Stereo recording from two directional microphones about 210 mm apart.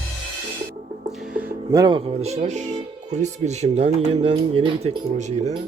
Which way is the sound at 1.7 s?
20° right (ahead or behind).